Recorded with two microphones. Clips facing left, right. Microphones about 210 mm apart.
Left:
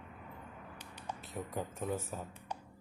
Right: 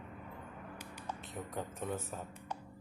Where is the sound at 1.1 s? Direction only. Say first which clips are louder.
Left 2 dB; 5° left (ahead or behind).